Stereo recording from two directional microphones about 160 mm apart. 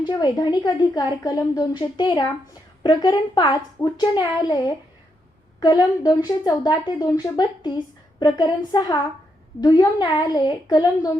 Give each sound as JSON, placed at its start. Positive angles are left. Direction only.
{"t": 0.0, "sound": "a woman's voice", "side_deg": 25}